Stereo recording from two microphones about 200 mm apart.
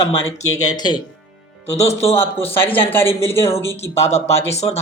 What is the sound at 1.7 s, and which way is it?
Speech, 30° left (ahead or behind).